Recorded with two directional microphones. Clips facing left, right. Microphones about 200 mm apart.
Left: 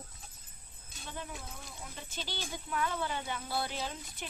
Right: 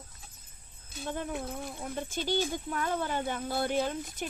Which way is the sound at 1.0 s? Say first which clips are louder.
Right 9 dB; 55° right (ahead or behind).